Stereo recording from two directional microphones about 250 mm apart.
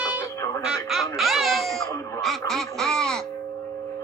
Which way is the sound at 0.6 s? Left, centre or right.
Centre.